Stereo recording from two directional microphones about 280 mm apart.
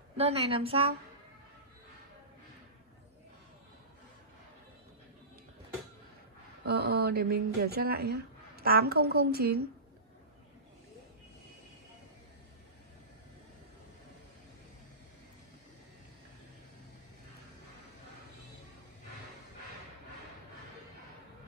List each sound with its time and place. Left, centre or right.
0.2 s a woman's voice: centre
6.6 s speech: right